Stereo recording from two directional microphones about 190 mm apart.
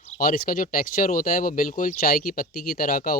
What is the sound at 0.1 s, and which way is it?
Speech, 50° left (ahead or behind).